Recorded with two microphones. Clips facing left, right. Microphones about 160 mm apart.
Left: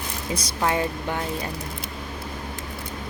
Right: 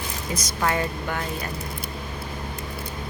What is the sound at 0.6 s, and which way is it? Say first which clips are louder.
Speech: left 1 dB; 20° left (ahead or behind).